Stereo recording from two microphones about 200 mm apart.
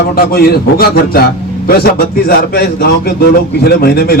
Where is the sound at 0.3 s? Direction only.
50° left (ahead or behind).